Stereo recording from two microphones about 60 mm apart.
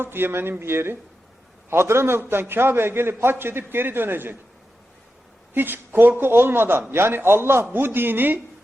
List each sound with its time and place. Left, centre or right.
0.0 s a man's voice: right
5.5 s a man's voice: right